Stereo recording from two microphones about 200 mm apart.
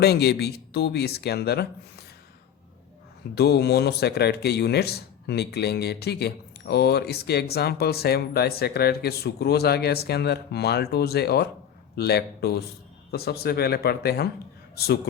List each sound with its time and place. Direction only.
0.0 s speech: 55° left (ahead or behind)
3.3 s speech: 55° left (ahead or behind)